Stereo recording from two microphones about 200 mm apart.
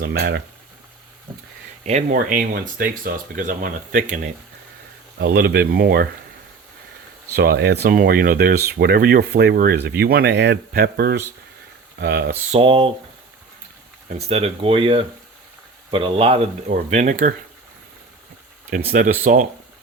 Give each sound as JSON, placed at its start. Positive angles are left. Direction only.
{"t": 0.0, "sound": "speech", "side_deg": -55}
{"t": 1.8, "sound": "speech", "side_deg": -35}
{"t": 5.2, "sound": "speech", "side_deg": -50}
{"t": 7.3, "sound": "speech", "side_deg": -50}
{"t": 12.5, "sound": "speech", "side_deg": -25}
{"t": 14.3, "sound": "speech", "side_deg": -30}
{"t": 18.9, "sound": "speech", "side_deg": -45}